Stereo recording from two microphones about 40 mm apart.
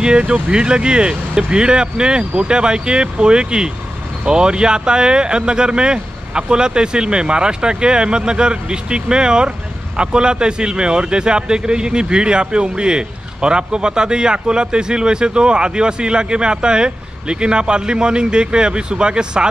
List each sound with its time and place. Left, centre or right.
0.0 s a man's voice: right